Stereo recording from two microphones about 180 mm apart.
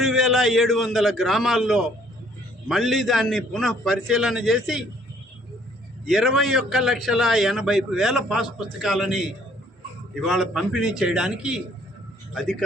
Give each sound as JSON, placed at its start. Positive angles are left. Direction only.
{"t": 0.0, "sound": "a man's voice", "side_deg": 0}
{"t": 6.1, "sound": "a man's voice", "side_deg": 0}